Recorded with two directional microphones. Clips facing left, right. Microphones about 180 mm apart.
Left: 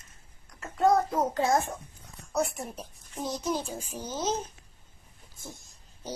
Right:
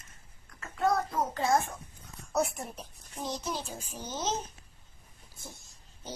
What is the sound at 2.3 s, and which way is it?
Speech, centre (ahead or behind).